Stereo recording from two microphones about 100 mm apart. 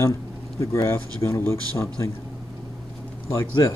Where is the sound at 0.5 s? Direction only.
30° left (ahead or behind).